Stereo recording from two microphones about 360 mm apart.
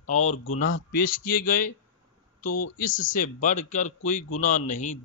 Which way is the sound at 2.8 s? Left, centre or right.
Left.